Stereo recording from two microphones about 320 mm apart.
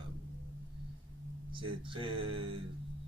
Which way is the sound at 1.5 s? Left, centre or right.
Centre.